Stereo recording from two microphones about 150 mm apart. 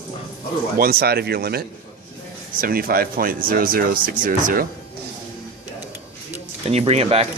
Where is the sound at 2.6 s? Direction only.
75° right (ahead or behind).